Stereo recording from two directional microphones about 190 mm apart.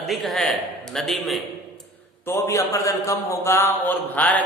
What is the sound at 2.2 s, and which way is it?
A man's voice, 15° left (ahead or behind).